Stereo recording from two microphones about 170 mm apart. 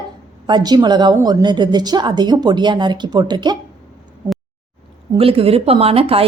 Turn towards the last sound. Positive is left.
turn(degrees=-35)  # may be behind; listen again after turning